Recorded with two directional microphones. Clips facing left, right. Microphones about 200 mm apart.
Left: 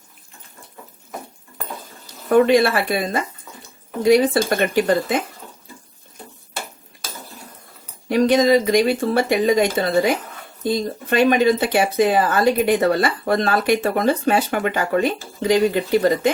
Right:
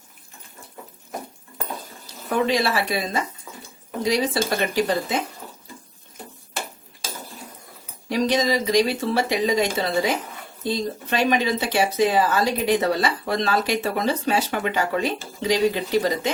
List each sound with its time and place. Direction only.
2.3 s speech: 55° left (ahead or behind)
8.1 s speech: 50° left (ahead or behind)
11.1 s speech: 50° left (ahead or behind)